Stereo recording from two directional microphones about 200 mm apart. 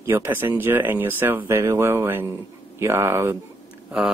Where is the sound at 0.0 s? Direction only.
10° right (ahead or behind).